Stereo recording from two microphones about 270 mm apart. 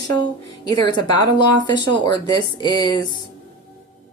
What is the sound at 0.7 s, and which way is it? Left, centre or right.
Speech, centre.